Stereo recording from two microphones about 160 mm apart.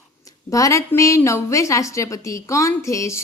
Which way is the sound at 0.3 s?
20° left (ahead or behind).